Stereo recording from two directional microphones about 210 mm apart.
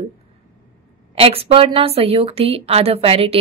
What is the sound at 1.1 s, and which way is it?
A woman's voice, 25° right (ahead or behind).